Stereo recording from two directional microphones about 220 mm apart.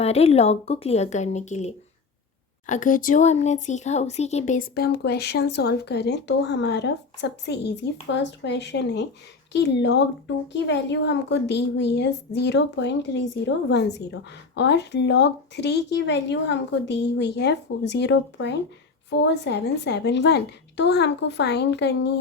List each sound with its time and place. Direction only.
0.0 s a woman's voice: 30° left (ahead or behind); by 22.2 s 50° left (ahead or behind)